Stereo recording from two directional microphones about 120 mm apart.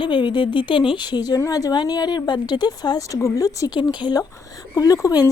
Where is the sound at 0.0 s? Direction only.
40° left (ahead or behind).